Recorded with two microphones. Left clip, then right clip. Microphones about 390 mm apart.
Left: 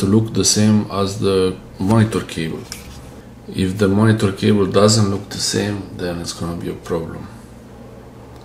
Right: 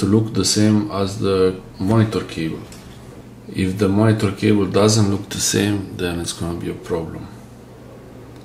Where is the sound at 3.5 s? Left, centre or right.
Centre.